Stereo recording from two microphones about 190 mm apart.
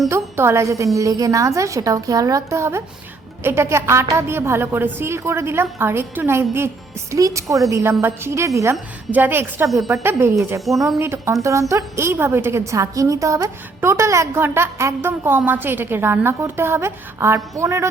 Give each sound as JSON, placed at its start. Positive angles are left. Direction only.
{"t": 0.1, "sound": "a woman's voice", "side_deg": -15}